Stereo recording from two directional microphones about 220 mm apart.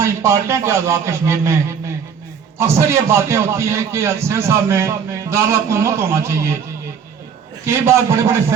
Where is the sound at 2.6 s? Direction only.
10° right (ahead or behind).